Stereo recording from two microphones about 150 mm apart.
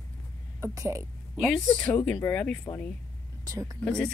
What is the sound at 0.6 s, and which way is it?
Speech, 20° right (ahead or behind).